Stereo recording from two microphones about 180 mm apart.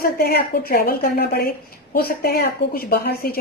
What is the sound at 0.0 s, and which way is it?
A woman's voice, 55° left (ahead or behind).